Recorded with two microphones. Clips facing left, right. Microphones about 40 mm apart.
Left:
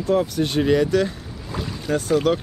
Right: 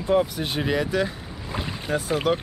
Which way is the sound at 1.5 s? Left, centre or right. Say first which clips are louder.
Left 1 dB; right.